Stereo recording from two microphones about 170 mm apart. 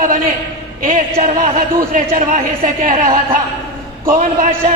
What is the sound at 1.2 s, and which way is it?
A man's voice, 45° right (ahead or behind).